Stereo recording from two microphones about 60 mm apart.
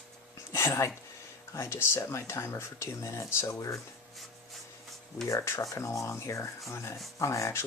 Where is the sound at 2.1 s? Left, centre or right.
Left.